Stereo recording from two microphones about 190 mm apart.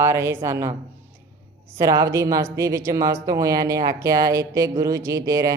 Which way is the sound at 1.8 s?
15° right (ahead or behind).